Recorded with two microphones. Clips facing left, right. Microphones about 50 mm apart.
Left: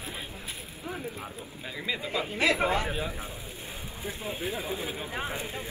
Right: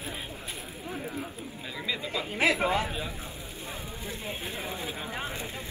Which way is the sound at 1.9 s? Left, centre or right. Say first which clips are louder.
Left 2 dB; centre.